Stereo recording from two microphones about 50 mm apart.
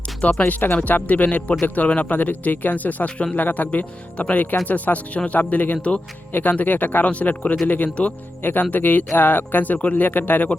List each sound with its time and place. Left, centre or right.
0.2 s speech: left
8.4 s speech: left